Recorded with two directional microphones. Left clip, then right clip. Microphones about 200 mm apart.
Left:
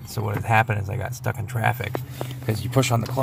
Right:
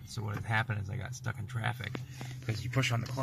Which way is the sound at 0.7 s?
35° left (ahead or behind).